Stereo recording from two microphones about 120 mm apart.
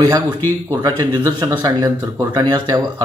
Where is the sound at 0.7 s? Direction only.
35° right (ahead or behind).